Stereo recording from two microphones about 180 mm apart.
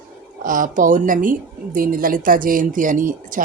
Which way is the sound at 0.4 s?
50° right (ahead or behind).